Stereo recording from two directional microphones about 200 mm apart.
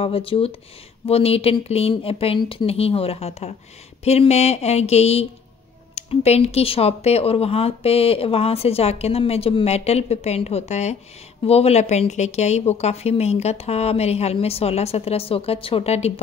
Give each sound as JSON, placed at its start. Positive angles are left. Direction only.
{"t": 0.0, "sound": "speech", "side_deg": 30}